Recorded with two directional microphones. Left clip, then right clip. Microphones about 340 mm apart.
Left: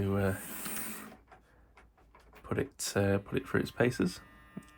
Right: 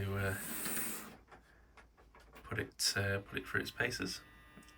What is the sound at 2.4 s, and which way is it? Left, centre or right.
Speech, centre.